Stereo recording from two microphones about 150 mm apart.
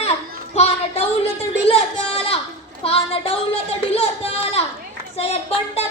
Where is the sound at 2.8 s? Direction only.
40° left (ahead or behind).